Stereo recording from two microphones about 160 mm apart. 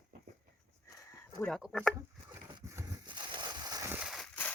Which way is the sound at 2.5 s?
20° right (ahead or behind).